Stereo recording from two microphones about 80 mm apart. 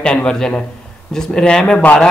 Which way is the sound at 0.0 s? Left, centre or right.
Centre.